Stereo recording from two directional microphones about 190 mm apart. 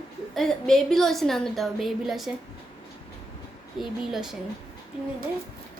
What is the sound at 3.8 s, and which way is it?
Speech, centre (ahead or behind).